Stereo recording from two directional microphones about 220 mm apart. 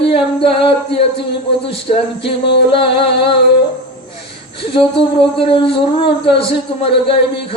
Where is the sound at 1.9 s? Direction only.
35° left (ahead or behind).